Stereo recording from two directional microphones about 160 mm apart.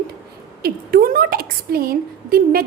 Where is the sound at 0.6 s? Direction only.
70° right (ahead or behind).